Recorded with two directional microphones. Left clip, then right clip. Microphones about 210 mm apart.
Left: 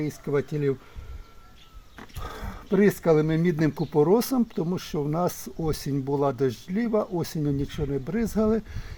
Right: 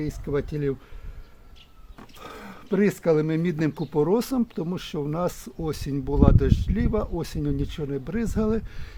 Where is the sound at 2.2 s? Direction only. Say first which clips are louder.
Even; 20° left (ahead or behind).